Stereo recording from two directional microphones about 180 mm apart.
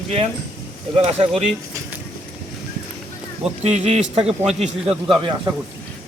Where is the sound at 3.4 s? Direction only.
35° right (ahead or behind).